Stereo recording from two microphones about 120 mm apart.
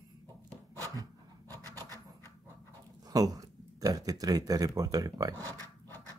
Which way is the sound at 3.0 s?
30° right (ahead or behind).